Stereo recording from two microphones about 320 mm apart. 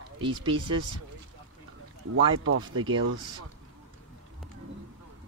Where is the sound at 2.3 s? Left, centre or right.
Right.